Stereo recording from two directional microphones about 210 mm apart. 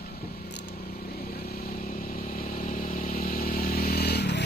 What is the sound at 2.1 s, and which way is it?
Vehicle, 40° left (ahead or behind).